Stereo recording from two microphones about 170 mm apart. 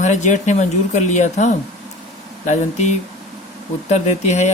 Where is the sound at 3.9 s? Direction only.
40° left (ahead or behind).